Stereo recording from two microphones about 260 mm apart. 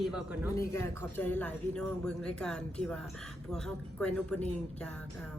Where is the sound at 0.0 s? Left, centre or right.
Centre.